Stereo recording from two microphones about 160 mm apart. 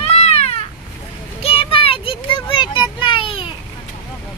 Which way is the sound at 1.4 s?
35° left (ahead or behind).